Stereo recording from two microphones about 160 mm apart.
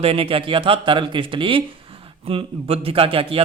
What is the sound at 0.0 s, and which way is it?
A man's voice, 35° right (ahead or behind).